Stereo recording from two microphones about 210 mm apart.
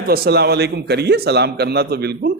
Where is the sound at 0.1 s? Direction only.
50° right (ahead or behind).